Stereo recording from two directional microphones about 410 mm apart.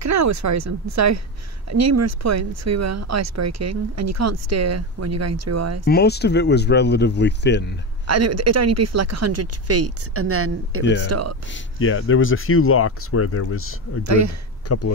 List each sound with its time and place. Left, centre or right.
0.0 s speech: right
5.9 s speech: left
8.1 s speech: right
10.8 s speech: left
11.1 s speech: right
11.4 s speech: left
14.0 s speech: right
14.7 s speech: left